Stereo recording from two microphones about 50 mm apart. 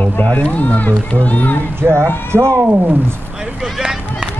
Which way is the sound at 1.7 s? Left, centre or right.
Right.